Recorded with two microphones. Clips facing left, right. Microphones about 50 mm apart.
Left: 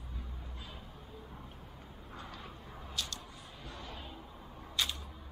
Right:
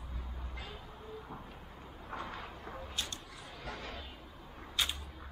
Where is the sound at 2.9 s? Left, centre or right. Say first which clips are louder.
Left 2 dB; right.